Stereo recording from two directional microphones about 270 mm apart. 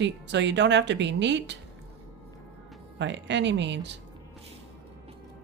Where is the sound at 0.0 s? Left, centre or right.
Right.